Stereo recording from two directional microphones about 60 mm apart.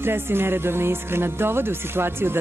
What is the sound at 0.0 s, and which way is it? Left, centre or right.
Speech, right.